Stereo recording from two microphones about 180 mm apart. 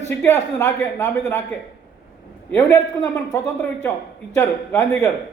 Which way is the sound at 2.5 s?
15° left (ahead or behind).